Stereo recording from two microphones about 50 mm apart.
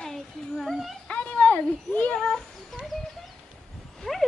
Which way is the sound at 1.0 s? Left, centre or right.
Left.